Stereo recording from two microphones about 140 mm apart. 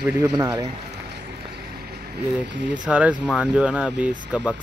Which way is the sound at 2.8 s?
10° right (ahead or behind).